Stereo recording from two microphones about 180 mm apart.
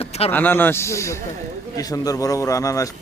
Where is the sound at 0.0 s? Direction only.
35° left (ahead or behind).